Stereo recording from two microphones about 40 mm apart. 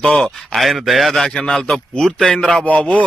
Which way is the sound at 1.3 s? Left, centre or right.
Centre.